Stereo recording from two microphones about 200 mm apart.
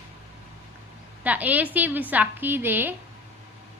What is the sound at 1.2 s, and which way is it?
A woman's voice, 10° right (ahead or behind).